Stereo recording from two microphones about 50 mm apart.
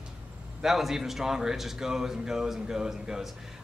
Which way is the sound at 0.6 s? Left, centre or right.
Centre.